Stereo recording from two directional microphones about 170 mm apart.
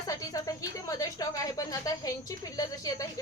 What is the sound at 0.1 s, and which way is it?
A woman's voice, 20° left (ahead or behind).